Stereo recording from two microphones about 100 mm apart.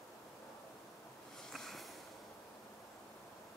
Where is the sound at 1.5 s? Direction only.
Centre (ahead or behind).